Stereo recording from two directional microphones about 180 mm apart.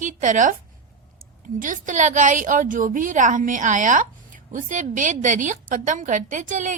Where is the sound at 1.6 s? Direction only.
45° right (ahead or behind).